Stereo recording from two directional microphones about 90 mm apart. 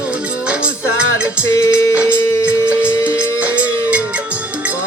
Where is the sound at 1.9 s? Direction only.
15° right (ahead or behind).